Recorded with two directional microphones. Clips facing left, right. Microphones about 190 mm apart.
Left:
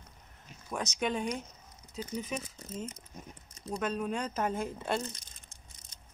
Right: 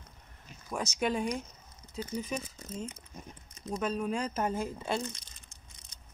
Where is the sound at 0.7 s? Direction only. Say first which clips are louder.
Right 1 dB; centre (ahead or behind).